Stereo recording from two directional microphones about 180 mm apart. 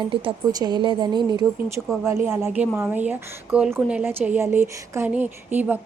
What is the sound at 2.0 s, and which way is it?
Speech, 15° right (ahead or behind).